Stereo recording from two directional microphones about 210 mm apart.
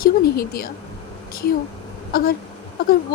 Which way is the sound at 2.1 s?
45° left (ahead or behind).